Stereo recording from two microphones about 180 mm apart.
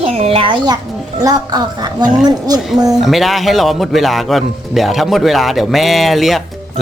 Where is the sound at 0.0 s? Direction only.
35° right (ahead or behind).